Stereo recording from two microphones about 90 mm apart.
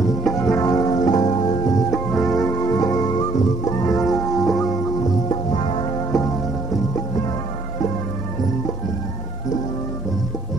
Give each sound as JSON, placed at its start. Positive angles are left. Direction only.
{"t": 0.2, "sound": "music", "side_deg": 5}
{"t": 0.5, "sound": "music", "side_deg": 40}
{"t": 2.0, "sound": "music", "side_deg": 5}
{"t": 2.5, "sound": "music", "side_deg": 40}
{"t": 4.0, "sound": "music", "side_deg": 0}
{"t": 5.5, "sound": "music", "side_deg": 70}
{"t": 5.9, "sound": "music", "side_deg": 40}